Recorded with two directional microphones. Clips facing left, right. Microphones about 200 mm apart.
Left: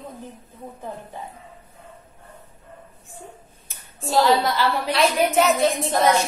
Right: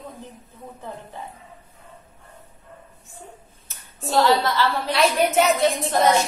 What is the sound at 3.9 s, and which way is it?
Speech, centre (ahead or behind).